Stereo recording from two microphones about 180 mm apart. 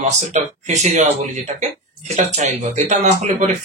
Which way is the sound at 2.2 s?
40° right (ahead or behind).